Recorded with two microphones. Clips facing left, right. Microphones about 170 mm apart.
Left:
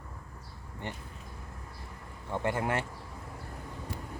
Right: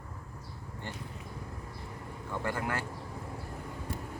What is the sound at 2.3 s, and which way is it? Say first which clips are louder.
Speech: left 4 dB; 20° left (ahead or behind).